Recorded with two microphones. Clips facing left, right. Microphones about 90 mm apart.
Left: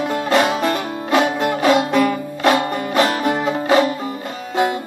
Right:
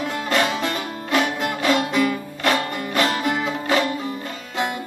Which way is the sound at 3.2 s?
45° left (ahead or behind).